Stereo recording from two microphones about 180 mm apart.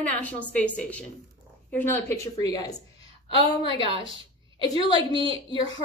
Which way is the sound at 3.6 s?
30° right (ahead or behind).